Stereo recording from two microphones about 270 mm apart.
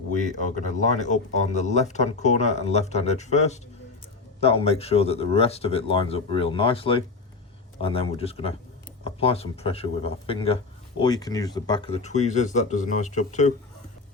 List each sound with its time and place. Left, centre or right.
0.4 s speech: left